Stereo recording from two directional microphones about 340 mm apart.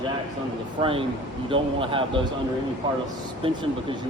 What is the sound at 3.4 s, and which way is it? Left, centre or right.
Speech, centre.